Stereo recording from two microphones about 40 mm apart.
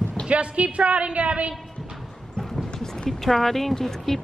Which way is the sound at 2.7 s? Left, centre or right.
Centre.